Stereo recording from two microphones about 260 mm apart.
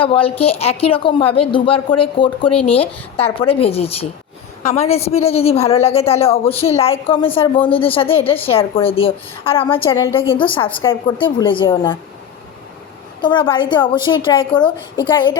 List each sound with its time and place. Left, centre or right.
0.0 s a woman's voice: left
13.2 s a woman's voice: centre